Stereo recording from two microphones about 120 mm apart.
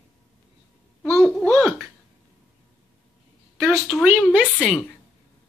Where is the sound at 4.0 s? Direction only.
10° right (ahead or behind).